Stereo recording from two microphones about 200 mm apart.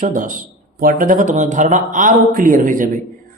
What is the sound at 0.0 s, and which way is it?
Speech, 40° right (ahead or behind).